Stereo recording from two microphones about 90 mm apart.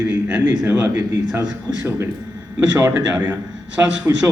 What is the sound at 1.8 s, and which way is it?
Speech, 30° right (ahead or behind).